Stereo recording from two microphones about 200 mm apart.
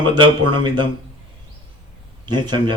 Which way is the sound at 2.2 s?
20° right (ahead or behind).